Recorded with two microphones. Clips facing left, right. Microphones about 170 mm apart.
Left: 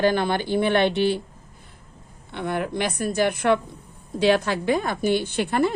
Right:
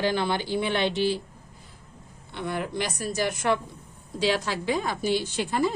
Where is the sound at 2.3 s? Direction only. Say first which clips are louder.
Left 4 dB; 55° left (ahead or behind).